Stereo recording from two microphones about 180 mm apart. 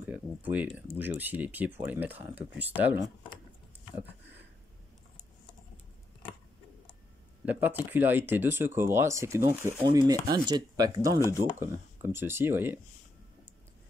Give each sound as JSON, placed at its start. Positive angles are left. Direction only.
{"t": 0.0, "sound": "a sound", "side_deg": -10}
{"t": 0.9, "sound": "speech", "side_deg": -10}
{"t": 7.4, "sound": "speech", "side_deg": -10}